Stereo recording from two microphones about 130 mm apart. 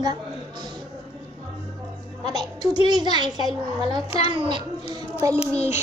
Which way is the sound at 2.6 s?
35° right (ahead or behind).